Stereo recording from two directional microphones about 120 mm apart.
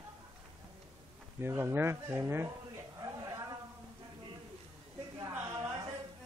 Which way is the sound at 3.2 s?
30° right (ahead or behind).